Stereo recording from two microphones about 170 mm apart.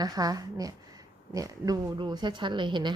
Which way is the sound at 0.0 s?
20° right (ahead or behind).